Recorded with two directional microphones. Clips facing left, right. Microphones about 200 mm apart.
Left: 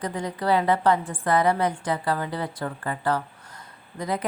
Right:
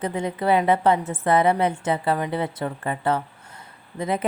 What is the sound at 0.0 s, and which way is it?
A woman's voice, 25° right (ahead or behind).